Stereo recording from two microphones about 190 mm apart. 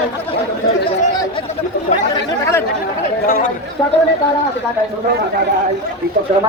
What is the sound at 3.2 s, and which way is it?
Speech, 50° left (ahead or behind).